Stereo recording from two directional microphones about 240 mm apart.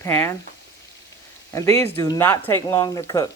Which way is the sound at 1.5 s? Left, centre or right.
Centre.